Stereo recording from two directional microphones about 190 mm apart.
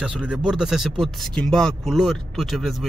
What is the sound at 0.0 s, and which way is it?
Speech, 5° right (ahead or behind).